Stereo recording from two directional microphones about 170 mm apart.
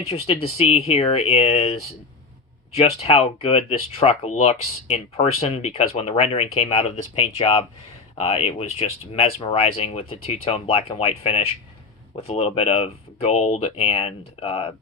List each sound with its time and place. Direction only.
0.4 s speech: 35° left (ahead or behind)